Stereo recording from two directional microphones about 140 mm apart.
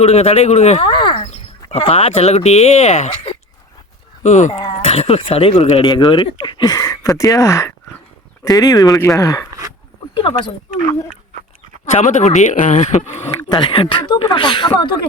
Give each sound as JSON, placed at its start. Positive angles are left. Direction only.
{"t": 0.0, "sound": "speech", "side_deg": 50}
{"t": 0.9, "sound": "speech", "side_deg": 35}
{"t": 4.2, "sound": "speech", "side_deg": 60}
{"t": 4.8, "sound": "speech", "side_deg": 45}
{"t": 5.8, "sound": "speech", "side_deg": 30}
{"t": 10.2, "sound": "speech", "side_deg": 40}
{"t": 11.9, "sound": "speech", "side_deg": 55}
{"t": 13.6, "sound": "speech", "side_deg": 40}